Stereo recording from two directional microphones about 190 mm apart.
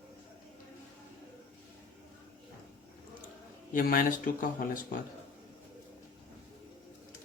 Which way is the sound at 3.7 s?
50° left (ahead or behind).